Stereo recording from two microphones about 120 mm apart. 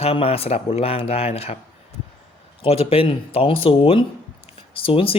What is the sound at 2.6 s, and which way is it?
Speech, 50° left (ahead or behind).